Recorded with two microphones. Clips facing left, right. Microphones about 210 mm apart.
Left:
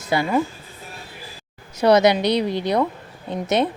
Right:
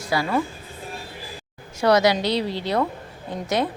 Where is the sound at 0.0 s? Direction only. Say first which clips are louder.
Left 3 dB; 20° left (ahead or behind).